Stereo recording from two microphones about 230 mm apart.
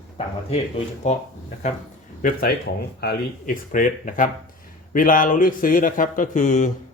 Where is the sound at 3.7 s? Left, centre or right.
Left.